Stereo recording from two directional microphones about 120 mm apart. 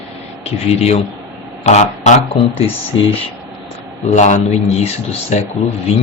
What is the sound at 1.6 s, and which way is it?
Speech, 70° left (ahead or behind).